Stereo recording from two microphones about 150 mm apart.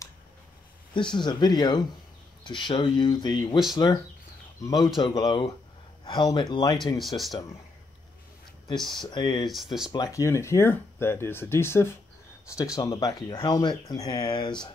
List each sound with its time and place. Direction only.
0.9 s speech: 30° left (ahead or behind)
7.0 s speech: centre (ahead or behind)
9.0 s speech: 30° left (ahead or behind)